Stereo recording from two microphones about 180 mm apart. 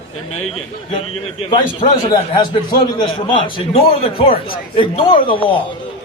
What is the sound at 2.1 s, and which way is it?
A man's voice, 25° left (ahead or behind).